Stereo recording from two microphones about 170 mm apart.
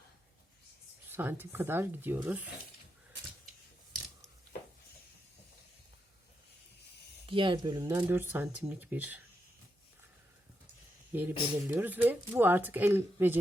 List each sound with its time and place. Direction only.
1.1 s speech: 10° right (ahead or behind)
7.3 s speech: 30° right (ahead or behind)
7.9 s speech: 15° right (ahead or behind)
11.1 s speech: 10° right (ahead or behind)